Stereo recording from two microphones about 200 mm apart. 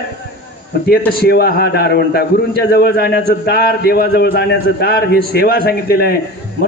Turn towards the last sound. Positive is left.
turn(degrees=50)  # may be behind; listen again after turning